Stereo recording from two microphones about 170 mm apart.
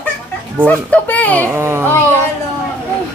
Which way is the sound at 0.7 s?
10° left (ahead or behind).